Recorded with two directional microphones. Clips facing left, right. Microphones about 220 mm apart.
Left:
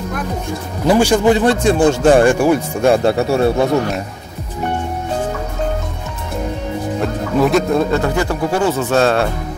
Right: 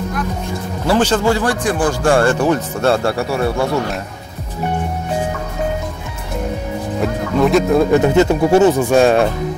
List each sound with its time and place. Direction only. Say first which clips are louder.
0.8 s speech: left 3 dB; 15° left (ahead or behind)
7.0 s speech: right 1 dB; centre (ahead or behind)
7.9 s speech: right 5 dB; 20° right (ahead or behind)